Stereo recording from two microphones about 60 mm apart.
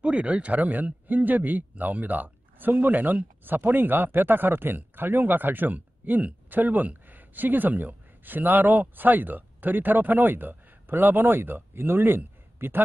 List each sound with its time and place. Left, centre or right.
0.0 s speech: centre; by 12.8 s right